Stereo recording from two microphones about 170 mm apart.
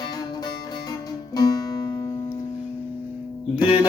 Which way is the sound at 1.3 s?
20° left (ahead or behind).